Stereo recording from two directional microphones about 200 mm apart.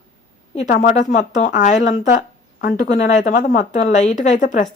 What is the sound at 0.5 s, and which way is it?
Speech, 35° left (ahead or behind).